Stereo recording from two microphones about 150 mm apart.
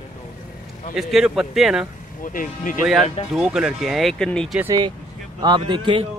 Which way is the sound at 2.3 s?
60° left (ahead or behind).